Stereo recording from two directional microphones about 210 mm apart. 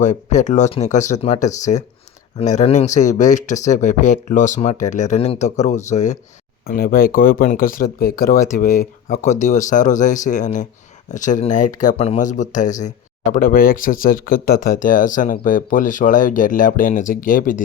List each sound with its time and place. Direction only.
0.0 s speech: 35° left (ahead or behind)
6.7 s speech: 45° left (ahead or behind)